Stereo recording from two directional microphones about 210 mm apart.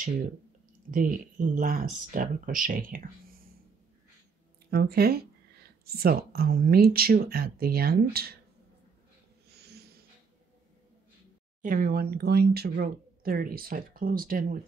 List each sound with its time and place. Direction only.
0.9 s speech: 40° right (ahead or behind)
4.6 s speech: 50° right (ahead or behind)
9.6 s dog: 50° right (ahead or behind)
11.6 s speech: 40° right (ahead or behind)